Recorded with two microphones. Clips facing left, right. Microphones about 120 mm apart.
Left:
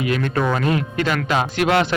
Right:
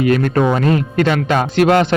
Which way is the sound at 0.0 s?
45° right (ahead or behind).